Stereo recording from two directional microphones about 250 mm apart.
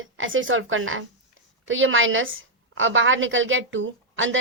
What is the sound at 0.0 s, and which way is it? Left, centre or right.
A woman's voice, right.